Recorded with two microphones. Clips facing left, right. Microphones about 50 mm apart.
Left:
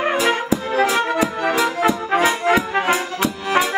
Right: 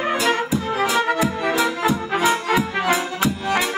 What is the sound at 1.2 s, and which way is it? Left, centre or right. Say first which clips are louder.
Music: left 1 dB; left.